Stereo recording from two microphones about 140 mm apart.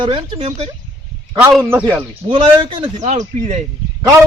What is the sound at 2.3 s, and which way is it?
Speech, 40° right (ahead or behind).